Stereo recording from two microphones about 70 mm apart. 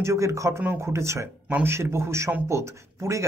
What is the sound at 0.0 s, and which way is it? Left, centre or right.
A man's voice, right.